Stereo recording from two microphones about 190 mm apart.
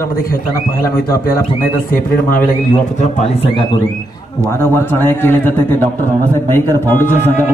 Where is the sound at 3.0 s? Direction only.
35° left (ahead or behind).